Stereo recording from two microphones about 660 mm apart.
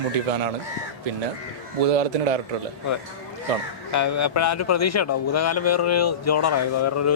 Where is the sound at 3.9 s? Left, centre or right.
Left.